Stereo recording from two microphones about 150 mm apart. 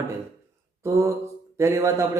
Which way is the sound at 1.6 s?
20° right (ahead or behind).